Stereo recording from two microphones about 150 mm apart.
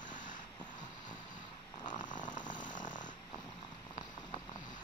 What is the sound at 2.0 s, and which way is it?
Snoring, 30° left (ahead or behind).